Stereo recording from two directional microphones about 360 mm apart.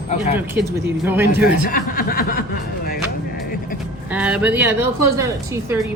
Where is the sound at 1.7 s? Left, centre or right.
Left.